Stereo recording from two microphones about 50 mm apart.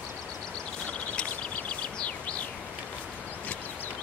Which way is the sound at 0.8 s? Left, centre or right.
Left.